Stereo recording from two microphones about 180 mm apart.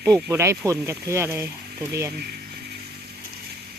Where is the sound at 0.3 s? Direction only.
15° right (ahead or behind).